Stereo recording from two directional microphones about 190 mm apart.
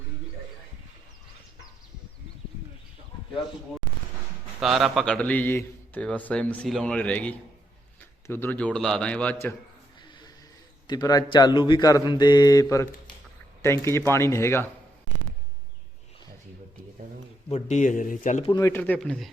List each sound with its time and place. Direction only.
4.6 s a man's voice: centre (ahead or behind)
10.8 s a man's voice: 20° left (ahead or behind)
17.5 s speech: 40° left (ahead or behind)
18.5 s a man's voice: 15° left (ahead or behind)